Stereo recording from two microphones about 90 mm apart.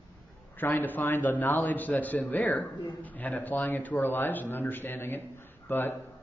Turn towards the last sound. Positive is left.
turn(degrees=25)  # may be behind; listen again after turning